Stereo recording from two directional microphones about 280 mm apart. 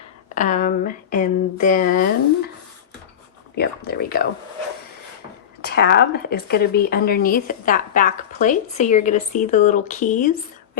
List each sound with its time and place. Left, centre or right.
0.3 s speech: left
3.6 s speech: left
5.6 s speech: left